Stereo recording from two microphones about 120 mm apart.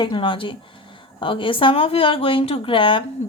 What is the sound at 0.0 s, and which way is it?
A woman's voice, 40° left (ahead or behind).